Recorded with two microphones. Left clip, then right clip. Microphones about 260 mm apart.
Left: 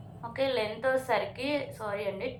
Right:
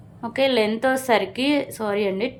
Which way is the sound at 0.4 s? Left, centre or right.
Right.